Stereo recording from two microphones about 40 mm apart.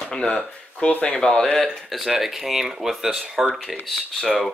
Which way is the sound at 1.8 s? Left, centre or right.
Centre.